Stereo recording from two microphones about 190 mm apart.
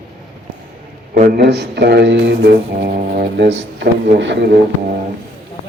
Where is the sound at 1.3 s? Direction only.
60° right (ahead or behind).